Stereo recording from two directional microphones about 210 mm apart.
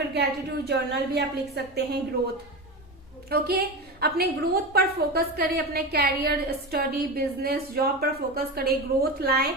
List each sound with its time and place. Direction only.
0.1 s a woman's voice: 50° right (ahead or behind)
3.2 s a woman's voice: 50° right (ahead or behind)